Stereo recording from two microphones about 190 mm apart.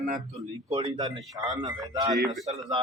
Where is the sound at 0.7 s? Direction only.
30° right (ahead or behind).